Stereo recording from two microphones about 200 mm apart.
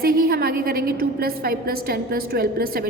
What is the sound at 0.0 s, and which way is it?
A woman's voice, 50° right (ahead or behind).